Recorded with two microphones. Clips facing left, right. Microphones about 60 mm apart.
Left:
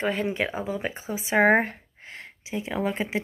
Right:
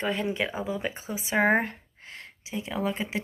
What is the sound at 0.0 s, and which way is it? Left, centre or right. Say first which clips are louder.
Speech: left 2 dB; left.